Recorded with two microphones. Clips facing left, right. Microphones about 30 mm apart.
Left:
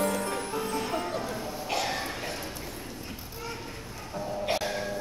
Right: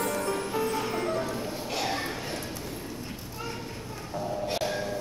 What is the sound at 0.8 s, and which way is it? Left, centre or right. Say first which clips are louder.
Music: right 2 dB; centre.